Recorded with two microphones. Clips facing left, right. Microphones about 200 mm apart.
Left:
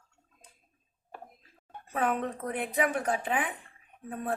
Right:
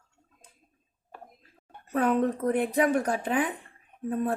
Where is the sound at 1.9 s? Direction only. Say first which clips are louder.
Right 6 dB; 40° right (ahead or behind).